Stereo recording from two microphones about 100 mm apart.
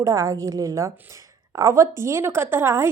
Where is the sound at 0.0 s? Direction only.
35° right (ahead or behind).